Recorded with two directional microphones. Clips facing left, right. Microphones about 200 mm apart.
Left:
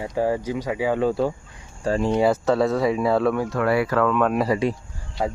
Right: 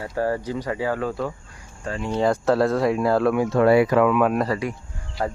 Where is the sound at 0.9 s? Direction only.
30° left (ahead or behind).